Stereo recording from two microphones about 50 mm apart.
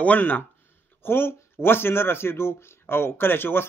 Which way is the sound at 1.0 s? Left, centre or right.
Left.